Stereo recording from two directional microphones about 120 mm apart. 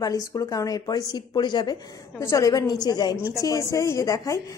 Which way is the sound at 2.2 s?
25° left (ahead or behind).